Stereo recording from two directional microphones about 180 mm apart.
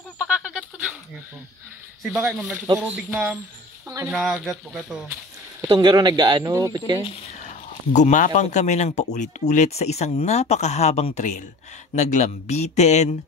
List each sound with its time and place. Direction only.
0.2 s a sound: 5° right (ahead or behind)
2.1 s speech: 5° right (ahead or behind)
5.7 s speech: 25° right (ahead or behind)
7.3 s speech: 40° left (ahead or behind)